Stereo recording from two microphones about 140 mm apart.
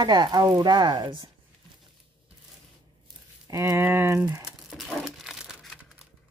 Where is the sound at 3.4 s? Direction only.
25° right (ahead or behind).